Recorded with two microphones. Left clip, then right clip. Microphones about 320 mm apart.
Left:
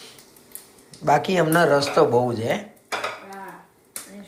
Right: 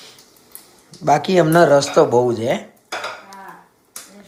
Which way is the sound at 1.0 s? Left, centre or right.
Centre.